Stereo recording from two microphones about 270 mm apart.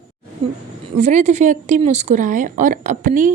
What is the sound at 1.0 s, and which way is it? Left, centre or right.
A woman's voice, right.